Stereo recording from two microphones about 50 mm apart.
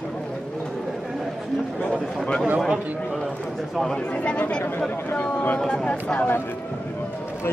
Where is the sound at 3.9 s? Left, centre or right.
Left.